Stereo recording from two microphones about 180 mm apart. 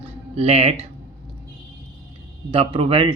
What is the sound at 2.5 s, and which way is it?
Speech, 30° right (ahead or behind).